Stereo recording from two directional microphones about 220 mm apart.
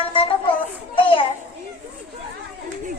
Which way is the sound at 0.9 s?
25° left (ahead or behind).